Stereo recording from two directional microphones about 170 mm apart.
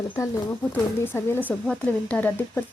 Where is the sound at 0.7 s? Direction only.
15° left (ahead or behind).